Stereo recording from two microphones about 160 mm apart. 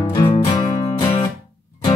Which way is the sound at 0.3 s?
35° left (ahead or behind).